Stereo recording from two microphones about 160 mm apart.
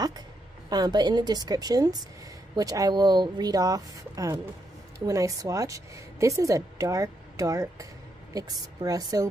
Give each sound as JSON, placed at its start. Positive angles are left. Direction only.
{"t": 0.7, "sound": "a woman's voice", "side_deg": -25}